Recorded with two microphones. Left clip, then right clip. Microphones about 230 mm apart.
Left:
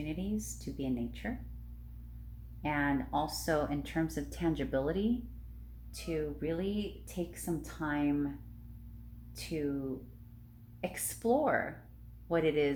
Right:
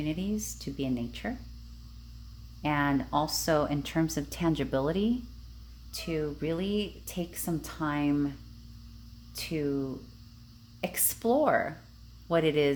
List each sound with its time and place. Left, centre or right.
0.0 s speech: right
2.6 s speech: right
9.3 s speech: right
10.8 s speech: right